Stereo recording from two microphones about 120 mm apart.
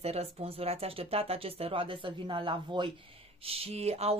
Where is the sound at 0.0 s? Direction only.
60° right (ahead or behind).